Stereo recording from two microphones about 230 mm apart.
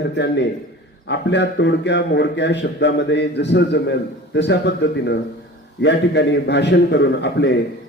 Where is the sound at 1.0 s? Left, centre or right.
Left.